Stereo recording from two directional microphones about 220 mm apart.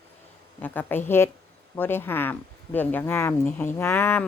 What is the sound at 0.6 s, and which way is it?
A woman's voice, 10° left (ahead or behind).